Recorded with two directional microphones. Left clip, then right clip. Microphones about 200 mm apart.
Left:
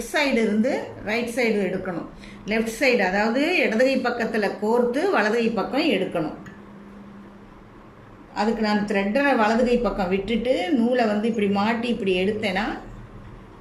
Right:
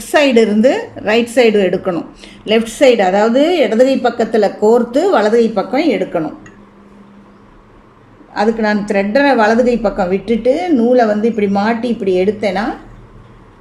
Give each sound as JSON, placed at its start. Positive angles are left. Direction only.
{"t": 0.1, "sound": "a woman's voice", "side_deg": -45}
{"t": 8.3, "sound": "a woman's voice", "side_deg": -20}